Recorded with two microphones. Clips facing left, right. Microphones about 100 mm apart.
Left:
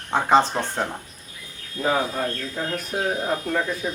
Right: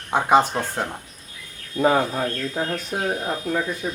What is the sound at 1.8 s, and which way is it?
Speech, 15° right (ahead or behind).